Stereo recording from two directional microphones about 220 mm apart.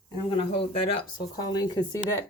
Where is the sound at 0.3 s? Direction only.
25° left (ahead or behind).